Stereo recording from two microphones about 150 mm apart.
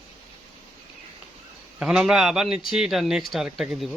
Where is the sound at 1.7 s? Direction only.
5° right (ahead or behind).